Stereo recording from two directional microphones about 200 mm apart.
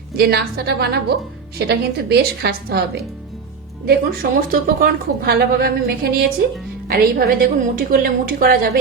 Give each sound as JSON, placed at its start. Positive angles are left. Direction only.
{"t": 0.2, "sound": "a woman's voice", "side_deg": -50}